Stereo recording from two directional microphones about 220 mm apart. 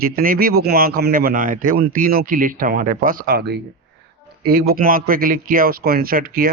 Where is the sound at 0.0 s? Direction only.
40° right (ahead or behind).